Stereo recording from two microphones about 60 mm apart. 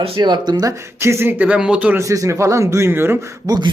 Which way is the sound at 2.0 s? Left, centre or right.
Right.